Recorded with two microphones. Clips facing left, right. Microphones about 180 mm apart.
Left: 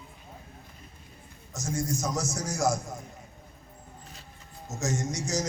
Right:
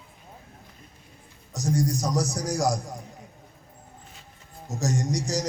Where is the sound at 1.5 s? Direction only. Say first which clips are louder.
Right 6 dB; 35° right (ahead or behind).